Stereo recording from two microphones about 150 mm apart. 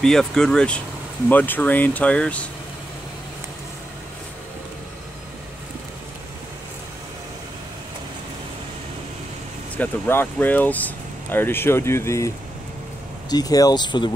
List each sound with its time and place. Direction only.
0.0 s speech: 5° left (ahead or behind)
9.8 s speech: 15° left (ahead or behind)
13.3 s speech: 25° left (ahead or behind)